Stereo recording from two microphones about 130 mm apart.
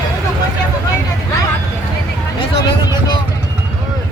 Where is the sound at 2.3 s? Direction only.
35° left (ahead or behind).